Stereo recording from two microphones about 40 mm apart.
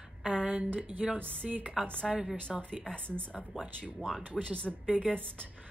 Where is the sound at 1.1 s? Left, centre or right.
Left.